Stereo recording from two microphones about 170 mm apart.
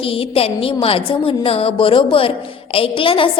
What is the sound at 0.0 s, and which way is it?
A woman's voice, 35° left (ahead or behind).